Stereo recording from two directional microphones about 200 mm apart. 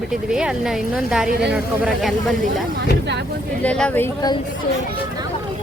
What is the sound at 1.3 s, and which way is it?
Speech, 55° right (ahead or behind).